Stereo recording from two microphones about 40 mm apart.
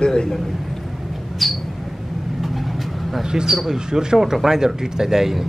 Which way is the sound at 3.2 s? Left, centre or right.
Centre.